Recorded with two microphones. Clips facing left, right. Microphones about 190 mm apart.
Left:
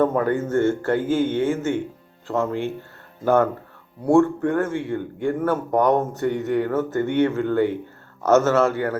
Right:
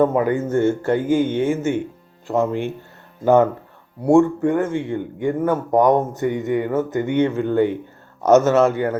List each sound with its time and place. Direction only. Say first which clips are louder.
0.0 s speech: right 2 dB; 10° right (ahead or behind)